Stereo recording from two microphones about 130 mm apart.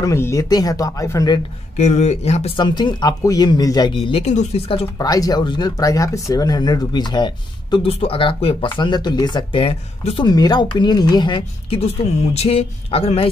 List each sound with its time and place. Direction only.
0.0 s speech: 25° left (ahead or behind)
1.8 s speech: 60° left (ahead or behind)
2.5 s speech: 35° left (ahead or behind)
4.9 s speech: 30° left (ahead or behind); by 10.2 s 45° left (ahead or behind)
10.2 s speech: 30° left (ahead or behind)
11.8 s speech: 50° left (ahead or behind)